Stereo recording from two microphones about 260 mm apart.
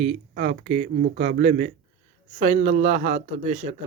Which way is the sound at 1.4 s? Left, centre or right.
Right.